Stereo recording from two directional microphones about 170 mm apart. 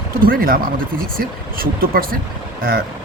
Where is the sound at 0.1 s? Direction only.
60° right (ahead or behind).